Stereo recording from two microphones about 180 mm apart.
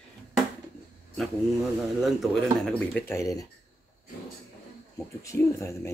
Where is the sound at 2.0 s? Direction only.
Centre (ahead or behind).